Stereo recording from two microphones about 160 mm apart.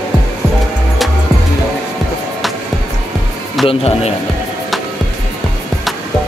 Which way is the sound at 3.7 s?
40° left (ahead or behind).